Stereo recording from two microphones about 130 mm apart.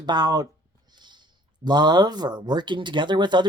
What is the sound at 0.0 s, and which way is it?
Speech, 30° right (ahead or behind).